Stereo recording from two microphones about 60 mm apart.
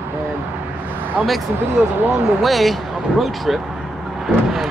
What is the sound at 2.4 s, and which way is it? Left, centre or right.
Speech, centre.